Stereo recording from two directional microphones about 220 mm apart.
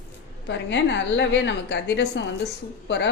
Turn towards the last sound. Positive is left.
turn(degrees=50)  # may be behind; listen again after turning